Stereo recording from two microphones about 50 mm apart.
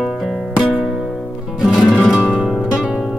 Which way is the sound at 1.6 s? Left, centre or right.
Centre.